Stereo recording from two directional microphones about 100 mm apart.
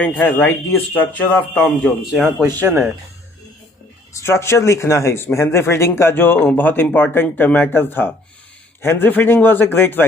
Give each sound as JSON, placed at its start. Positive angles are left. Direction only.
{"t": 0.0, "sound": "a man's voice", "side_deg": 15}
{"t": 2.6, "sound": "speech", "side_deg": -15}
{"t": 4.1, "sound": "speech", "side_deg": 25}